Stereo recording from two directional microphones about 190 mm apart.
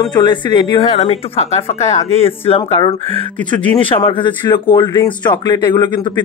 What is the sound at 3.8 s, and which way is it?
A woman's voice, 25° left (ahead or behind).